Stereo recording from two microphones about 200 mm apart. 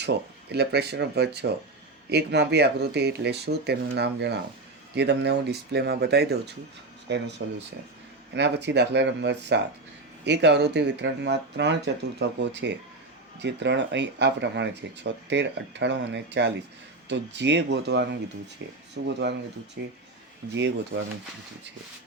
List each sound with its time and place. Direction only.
0.5 s speech: 55° right (ahead or behind)